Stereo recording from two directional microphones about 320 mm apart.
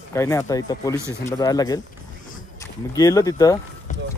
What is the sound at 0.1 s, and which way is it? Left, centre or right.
Speech, centre.